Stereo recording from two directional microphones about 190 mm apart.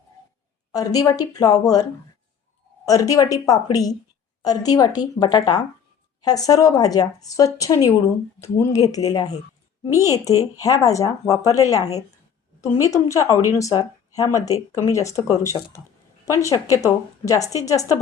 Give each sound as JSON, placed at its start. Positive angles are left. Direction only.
{"t": 0.7, "sound": "speech", "side_deg": 20}